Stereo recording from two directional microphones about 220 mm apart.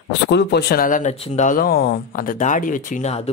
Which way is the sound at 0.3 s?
50° left (ahead or behind).